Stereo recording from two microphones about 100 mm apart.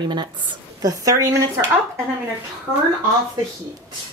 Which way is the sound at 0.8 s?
35° right (ahead or behind).